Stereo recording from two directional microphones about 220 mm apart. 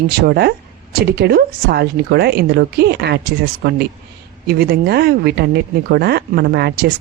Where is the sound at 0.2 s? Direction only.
45° right (ahead or behind).